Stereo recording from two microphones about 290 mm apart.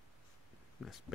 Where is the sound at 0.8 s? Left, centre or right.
Centre.